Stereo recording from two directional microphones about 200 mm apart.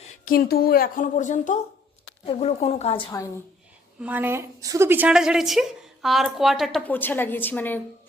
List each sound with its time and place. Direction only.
0.3 s speech: 50° left (ahead or behind); by 3.0 s 30° left (ahead or behind)
4.0 s a woman's voice: 10° right (ahead or behind); by 7.8 s 10° left (ahead or behind)